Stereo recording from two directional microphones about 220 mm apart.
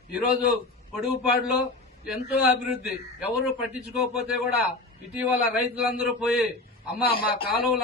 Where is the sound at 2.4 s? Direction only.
5° right (ahead or behind).